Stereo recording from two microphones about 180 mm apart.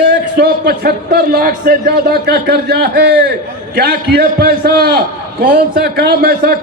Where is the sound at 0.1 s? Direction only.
65° right (ahead or behind).